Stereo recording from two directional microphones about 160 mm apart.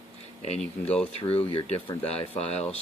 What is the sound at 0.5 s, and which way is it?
Speech, 5° left (ahead or behind).